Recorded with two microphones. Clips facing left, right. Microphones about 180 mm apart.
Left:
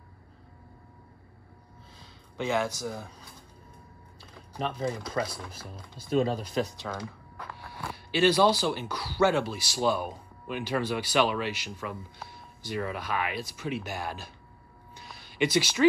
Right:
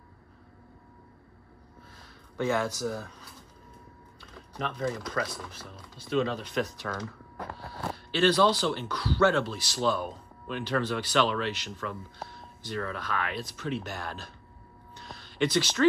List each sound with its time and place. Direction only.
2.3 s speech: 15° left (ahead or behind)
4.2 s typing: 30° left (ahead or behind)
5.2 s speech: 20° left (ahead or behind)
5.7 s speech: 40° left (ahead or behind)
6.9 s speech: 10° left (ahead or behind)
15.0 s a sound: 10° left (ahead or behind)